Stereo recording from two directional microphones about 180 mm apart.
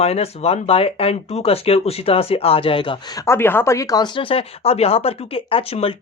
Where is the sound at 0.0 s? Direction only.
35° left (ahead or behind).